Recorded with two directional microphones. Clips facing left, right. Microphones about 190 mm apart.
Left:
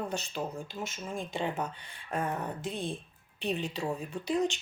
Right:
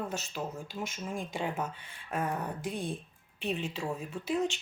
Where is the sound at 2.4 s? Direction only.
25° left (ahead or behind).